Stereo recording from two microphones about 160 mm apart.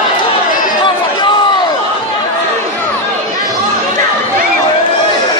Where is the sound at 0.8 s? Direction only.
30° left (ahead or behind).